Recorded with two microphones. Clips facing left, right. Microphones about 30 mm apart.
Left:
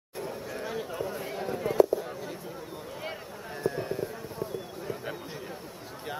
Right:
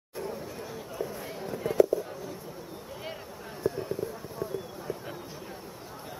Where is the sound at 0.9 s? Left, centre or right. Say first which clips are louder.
Left 2 dB; left.